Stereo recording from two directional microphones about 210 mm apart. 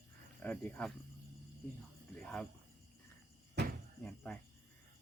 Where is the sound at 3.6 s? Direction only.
50° right (ahead or behind).